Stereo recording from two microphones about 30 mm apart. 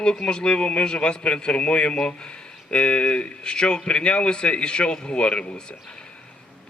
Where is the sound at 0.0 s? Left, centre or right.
Left.